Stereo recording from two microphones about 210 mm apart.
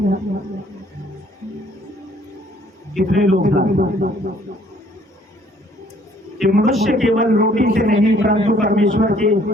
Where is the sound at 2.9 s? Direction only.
40° right (ahead or behind).